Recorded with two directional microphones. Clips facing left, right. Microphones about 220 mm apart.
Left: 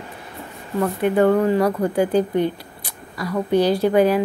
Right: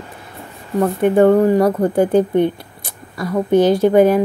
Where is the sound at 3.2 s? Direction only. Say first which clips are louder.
Right 4 dB; 25° right (ahead or behind).